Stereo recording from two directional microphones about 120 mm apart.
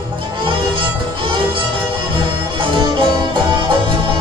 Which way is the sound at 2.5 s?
40° right (ahead or behind).